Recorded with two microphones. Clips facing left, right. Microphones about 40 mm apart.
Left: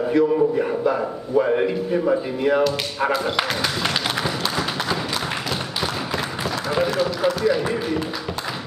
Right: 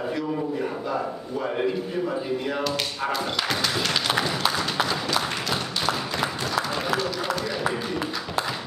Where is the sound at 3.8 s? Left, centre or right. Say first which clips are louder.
Left 1 dB; centre.